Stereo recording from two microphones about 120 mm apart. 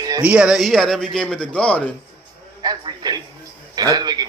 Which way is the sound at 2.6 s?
35° right (ahead or behind).